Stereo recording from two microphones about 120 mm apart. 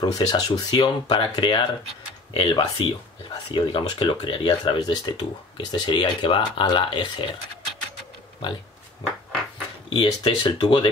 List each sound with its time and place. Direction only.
0.0 s speech: 35° left (ahead or behind)
9.8 s speech: 45° left (ahead or behind)